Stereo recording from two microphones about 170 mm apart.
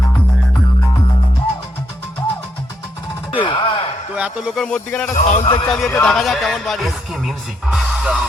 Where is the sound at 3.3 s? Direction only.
30° left (ahead or behind).